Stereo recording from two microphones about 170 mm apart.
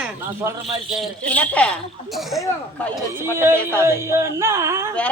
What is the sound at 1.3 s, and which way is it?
Speech, 10° left (ahead or behind).